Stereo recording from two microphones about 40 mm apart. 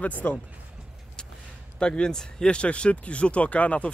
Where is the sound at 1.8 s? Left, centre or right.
Left.